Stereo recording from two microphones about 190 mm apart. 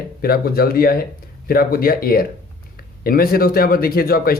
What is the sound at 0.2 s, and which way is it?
Speech, 55° left (ahead or behind).